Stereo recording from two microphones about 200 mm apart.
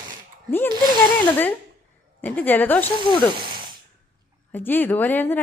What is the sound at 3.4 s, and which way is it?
Sigh, 25° right (ahead or behind).